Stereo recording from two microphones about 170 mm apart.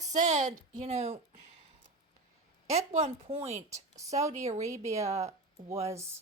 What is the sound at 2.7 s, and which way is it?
A woman's voice, 40° right (ahead or behind).